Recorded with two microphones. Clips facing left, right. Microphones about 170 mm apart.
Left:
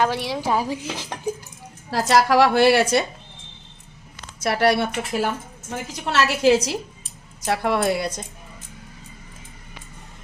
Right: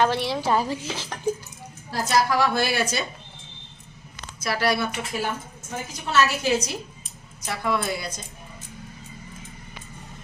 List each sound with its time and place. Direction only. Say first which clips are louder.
0.0 s speech: even; 10° left (ahead or behind)
1.9 s a woman's voice: left 5 dB; 80° left
4.4 s a woman's voice: left 5 dB; 65° left (ahead or behind)
6.1 s a woman's voice: left 4 dB; 80° left